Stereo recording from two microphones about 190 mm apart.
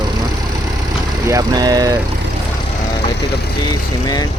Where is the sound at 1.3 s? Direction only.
20° right (ahead or behind).